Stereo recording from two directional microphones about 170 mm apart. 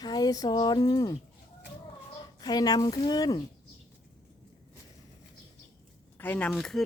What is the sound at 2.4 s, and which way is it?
A woman's voice, 25° left (ahead or behind).